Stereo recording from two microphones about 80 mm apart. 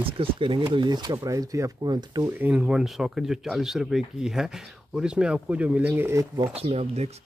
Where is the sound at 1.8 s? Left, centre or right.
Right.